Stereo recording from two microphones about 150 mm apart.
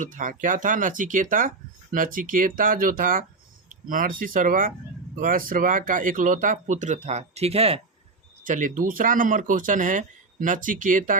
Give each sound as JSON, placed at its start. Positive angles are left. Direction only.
{"t": 0.0, "sound": "speech", "side_deg": -60}
{"t": 8.4, "sound": "speech", "side_deg": -60}